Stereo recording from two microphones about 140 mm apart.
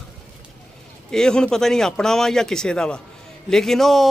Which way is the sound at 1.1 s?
5° left (ahead or behind).